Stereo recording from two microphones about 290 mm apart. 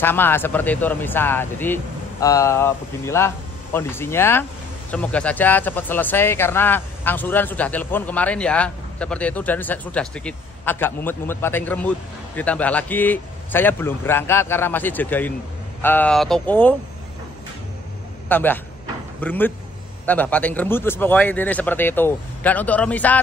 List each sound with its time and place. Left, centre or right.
0.0 s speech: centre
18.3 s speech: centre